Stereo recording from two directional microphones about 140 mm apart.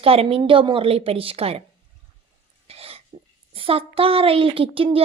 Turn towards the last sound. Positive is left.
turn(degrees=-40)  # may be behind; listen again after turning